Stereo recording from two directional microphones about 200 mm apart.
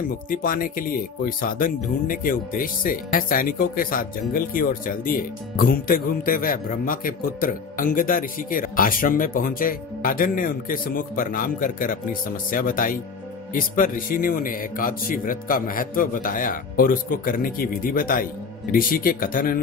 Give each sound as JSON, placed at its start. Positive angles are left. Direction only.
{"t": 0.3, "sound": "speech", "side_deg": 45}